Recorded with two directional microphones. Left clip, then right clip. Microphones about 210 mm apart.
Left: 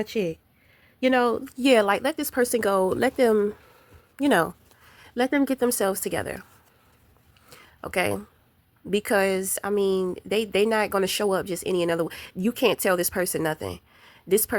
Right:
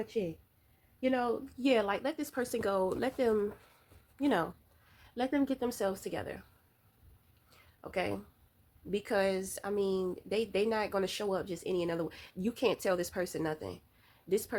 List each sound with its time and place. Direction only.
0.0 s a woman's voice: 50° left (ahead or behind)
7.5 s a sound: 50° left (ahead or behind)
8.9 s a woman's voice: 50° left (ahead or behind)